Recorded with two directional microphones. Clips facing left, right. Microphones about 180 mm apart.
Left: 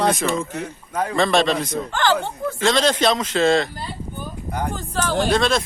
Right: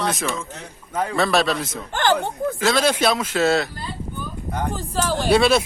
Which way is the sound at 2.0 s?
15° right (ahead or behind).